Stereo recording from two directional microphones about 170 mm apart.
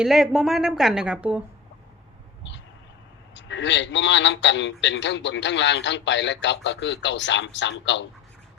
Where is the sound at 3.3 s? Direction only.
90° left.